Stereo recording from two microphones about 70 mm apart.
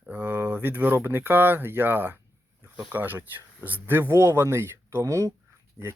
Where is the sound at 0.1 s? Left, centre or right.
Right.